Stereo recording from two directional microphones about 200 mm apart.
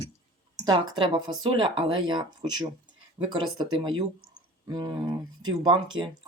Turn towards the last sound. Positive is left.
turn(degrees=-20)  # may be behind; listen again after turning